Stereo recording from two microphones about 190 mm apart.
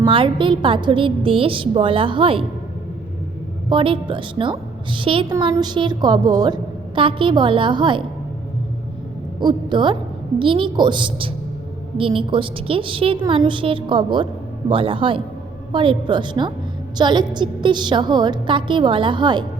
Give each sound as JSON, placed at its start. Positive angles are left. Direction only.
{"t": 0.0, "sound": "a woman's voice", "side_deg": -25}
{"t": 3.7, "sound": "a woman's voice", "side_deg": -25}
{"t": 9.4, "sound": "a woman's voice", "side_deg": -25}